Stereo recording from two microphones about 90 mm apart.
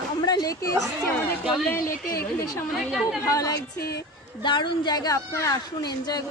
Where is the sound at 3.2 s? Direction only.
40° left (ahead or behind).